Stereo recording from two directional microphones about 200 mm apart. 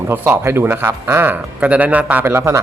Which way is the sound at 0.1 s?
10° right (ahead or behind).